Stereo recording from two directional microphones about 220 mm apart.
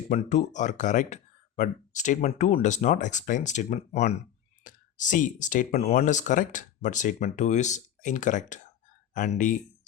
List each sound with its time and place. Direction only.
0.1 s speech: 35° left (ahead or behind)